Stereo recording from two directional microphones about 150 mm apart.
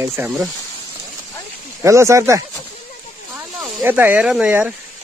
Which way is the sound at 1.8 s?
20° right (ahead or behind).